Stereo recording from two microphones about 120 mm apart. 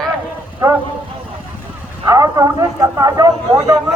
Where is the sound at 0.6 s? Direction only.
25° right (ahead or behind).